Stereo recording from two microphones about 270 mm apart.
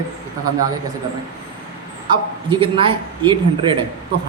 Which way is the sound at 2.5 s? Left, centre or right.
Centre.